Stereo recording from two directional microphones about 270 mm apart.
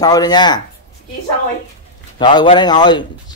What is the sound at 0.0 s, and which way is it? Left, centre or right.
Speech, centre.